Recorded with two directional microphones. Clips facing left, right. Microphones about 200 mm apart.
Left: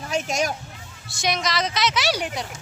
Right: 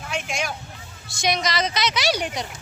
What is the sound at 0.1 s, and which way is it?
Speech, 40° left (ahead or behind).